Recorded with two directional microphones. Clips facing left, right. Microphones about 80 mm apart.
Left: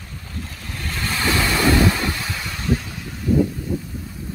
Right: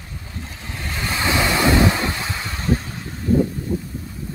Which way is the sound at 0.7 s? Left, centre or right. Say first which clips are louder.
Right 1 dB; centre.